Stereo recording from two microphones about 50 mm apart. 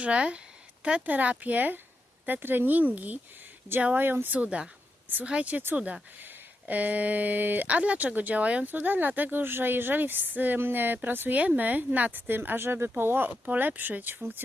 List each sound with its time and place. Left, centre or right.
0.0 s speech: right
4.4 s speech: right
8.6 s speech: right